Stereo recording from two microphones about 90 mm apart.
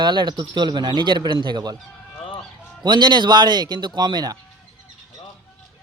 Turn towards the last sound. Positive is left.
turn(degrees=-50)  # may be behind; listen again after turning